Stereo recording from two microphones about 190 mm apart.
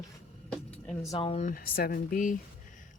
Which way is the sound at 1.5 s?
50° left (ahead or behind).